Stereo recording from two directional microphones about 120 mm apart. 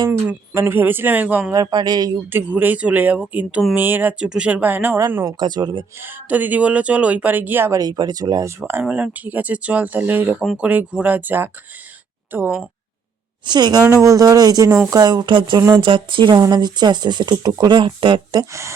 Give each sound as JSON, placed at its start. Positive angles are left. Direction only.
{"t": 0.1, "sound": "speech", "side_deg": -15}
{"t": 1.5, "sound": "speech", "side_deg": -35}
{"t": 2.3, "sound": "speech", "side_deg": -15}
{"t": 5.4, "sound": "speech", "side_deg": -35}
{"t": 6.0, "sound": "speech", "side_deg": -15}
{"t": 7.8, "sound": "speech", "side_deg": -35}
{"t": 13.4, "sound": "speech", "side_deg": -35}